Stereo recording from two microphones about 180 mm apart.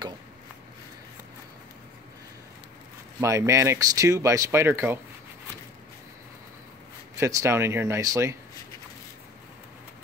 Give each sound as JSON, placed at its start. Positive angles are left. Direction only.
{"t": 3.2, "sound": "speech", "side_deg": -15}
{"t": 7.2, "sound": "speech", "side_deg": -15}